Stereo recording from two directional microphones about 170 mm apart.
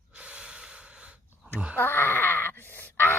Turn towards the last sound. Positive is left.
turn(degrees=10)  # may be behind; listen again after turning